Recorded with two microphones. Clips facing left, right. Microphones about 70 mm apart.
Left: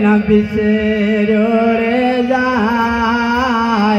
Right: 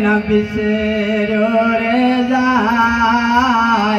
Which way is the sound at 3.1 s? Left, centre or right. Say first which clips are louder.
Right 1 dB; right.